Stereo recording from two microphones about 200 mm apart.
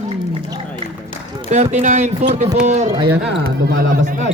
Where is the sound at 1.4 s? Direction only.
35° right (ahead or behind).